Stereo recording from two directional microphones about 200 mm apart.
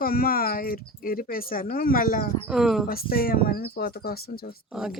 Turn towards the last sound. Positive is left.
turn(degrees=-5)  # may be behind; listen again after turning